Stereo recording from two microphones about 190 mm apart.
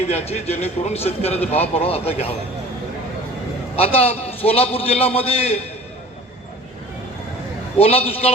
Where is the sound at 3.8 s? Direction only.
30° left (ahead or behind).